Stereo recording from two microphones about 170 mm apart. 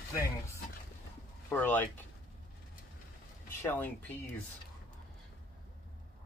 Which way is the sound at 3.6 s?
10° left (ahead or behind).